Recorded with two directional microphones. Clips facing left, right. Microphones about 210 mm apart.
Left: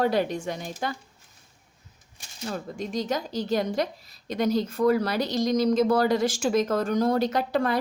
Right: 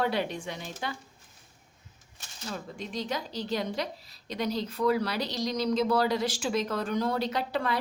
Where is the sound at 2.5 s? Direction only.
45° left (ahead or behind).